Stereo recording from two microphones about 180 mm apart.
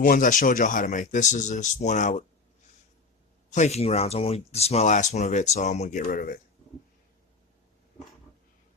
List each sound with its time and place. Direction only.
0.0 s speech: 50° left (ahead or behind)
3.5 s speech: 40° left (ahead or behind)
6.0 s speech: 50° left (ahead or behind)